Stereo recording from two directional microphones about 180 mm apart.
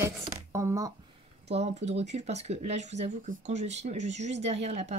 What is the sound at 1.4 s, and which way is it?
Speech, 35° right (ahead or behind).